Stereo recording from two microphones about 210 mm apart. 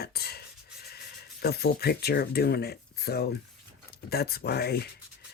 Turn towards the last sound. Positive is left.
turn(degrees=50)  # may be behind; listen again after turning